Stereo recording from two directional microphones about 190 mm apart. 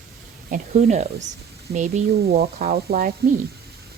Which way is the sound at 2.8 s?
50° right (ahead or behind).